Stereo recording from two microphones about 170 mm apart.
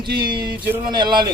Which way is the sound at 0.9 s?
25° right (ahead or behind).